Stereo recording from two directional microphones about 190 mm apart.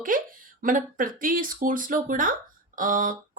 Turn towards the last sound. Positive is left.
turn(degrees=-45)  # may be behind; listen again after turning